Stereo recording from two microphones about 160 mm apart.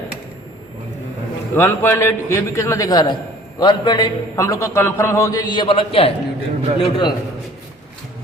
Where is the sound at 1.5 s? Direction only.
15° left (ahead or behind).